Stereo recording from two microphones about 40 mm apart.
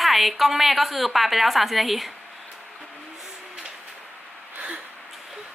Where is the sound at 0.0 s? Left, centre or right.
Centre.